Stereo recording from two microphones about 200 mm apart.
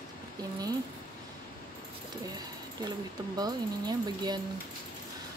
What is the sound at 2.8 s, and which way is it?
Speech, 20° right (ahead or behind).